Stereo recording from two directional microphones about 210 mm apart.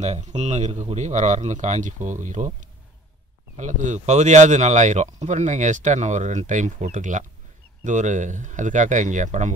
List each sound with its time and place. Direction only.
0.0 s speech: 35° right (ahead or behind)